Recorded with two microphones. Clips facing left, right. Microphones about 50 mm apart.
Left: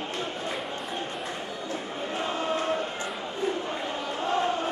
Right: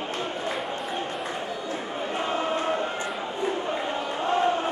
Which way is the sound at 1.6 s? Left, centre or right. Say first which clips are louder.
Right 2 dB; centre.